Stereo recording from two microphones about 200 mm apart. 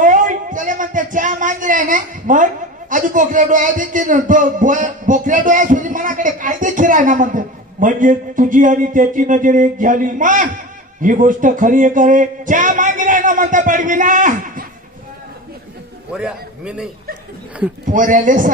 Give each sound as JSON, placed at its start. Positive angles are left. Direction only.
{"t": 0.0, "sound": "speech", "side_deg": -40}
{"t": 16.1, "sound": "a man's voice", "side_deg": -5}
{"t": 17.8, "sound": "speech", "side_deg": -40}